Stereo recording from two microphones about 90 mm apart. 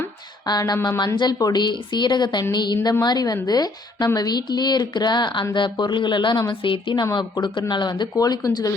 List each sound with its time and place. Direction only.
0.4 s a woman's voice: 50° left (ahead or behind)
6.7 s a woman's voice: 70° left (ahead or behind)
7.0 s a woman's voice: 45° left (ahead or behind)
8.1 s speech: 40° left (ahead or behind)